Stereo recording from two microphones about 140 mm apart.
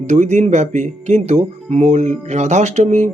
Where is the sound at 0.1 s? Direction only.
55° right (ahead or behind).